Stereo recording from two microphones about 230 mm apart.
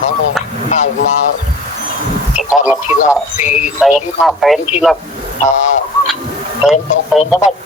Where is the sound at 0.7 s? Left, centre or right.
Left.